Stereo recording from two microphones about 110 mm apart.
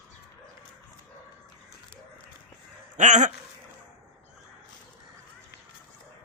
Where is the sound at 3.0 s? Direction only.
90° right.